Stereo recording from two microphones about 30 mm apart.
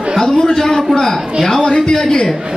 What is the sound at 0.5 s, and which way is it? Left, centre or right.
Speech, centre.